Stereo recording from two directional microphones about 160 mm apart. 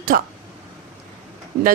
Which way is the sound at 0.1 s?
65° right (ahead or behind).